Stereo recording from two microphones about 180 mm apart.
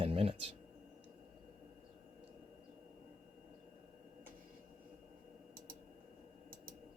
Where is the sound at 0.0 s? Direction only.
30° right (ahead or behind).